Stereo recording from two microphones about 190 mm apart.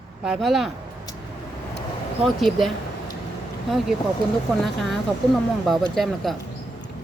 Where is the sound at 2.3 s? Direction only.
Centre (ahead or behind).